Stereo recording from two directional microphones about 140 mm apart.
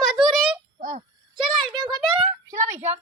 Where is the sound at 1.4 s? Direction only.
Centre (ahead or behind).